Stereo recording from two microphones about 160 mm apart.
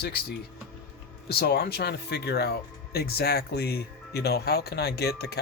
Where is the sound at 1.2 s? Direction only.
75° left (ahead or behind).